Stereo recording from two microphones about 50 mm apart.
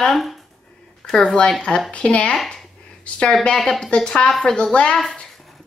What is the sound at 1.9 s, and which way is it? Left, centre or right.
Speech, left.